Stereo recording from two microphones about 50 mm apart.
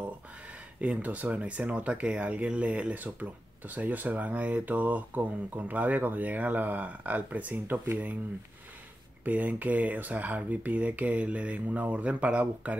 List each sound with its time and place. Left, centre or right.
0.7 s speech: right
9.2 s speech: right